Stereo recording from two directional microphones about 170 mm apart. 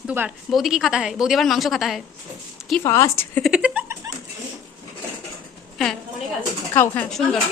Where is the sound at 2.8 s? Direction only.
15° left (ahead or behind).